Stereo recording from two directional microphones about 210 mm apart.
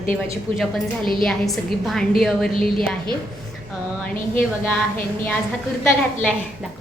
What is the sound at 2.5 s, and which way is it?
Speech, 25° right (ahead or behind).